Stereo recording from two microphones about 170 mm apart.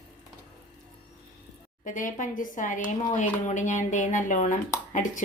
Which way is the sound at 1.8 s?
50° left (ahead or behind).